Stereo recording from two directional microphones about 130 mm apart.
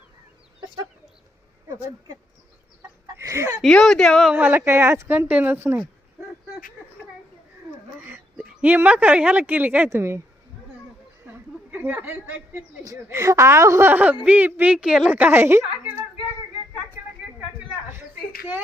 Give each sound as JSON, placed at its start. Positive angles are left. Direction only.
{"t": 1.6, "sound": "speech", "side_deg": -25}
{"t": 3.2, "sound": "a sound", "side_deg": -20}
{"t": 3.6, "sound": "a woman's voice", "side_deg": 5}
{"t": 4.4, "sound": "a woman's voice", "side_deg": -15}
{"t": 8.1, "sound": "speech", "side_deg": -10}
{"t": 11.3, "sound": "a sound", "side_deg": -15}
{"t": 12.8, "sound": "a woman's voice", "side_deg": -25}